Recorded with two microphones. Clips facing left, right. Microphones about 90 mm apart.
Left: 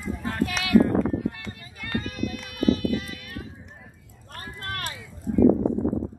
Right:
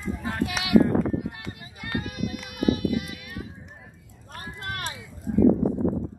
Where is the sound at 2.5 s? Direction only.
15° right (ahead or behind).